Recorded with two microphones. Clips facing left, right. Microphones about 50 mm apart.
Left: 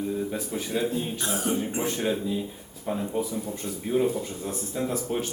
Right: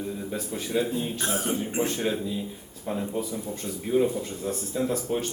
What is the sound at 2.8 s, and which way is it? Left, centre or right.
Speech, centre.